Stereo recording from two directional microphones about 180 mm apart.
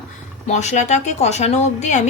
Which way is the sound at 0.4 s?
40° left (ahead or behind).